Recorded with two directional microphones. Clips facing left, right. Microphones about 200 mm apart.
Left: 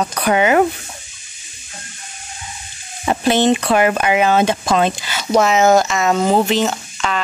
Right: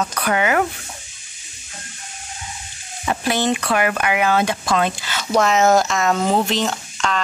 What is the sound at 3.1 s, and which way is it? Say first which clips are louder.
Speech: left 6 dB; 25° left (ahead or behind).